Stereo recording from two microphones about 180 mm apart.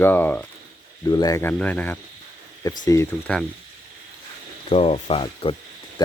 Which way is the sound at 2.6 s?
20° left (ahead or behind).